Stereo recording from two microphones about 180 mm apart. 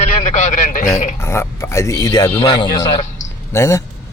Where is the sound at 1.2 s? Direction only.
15° left (ahead or behind).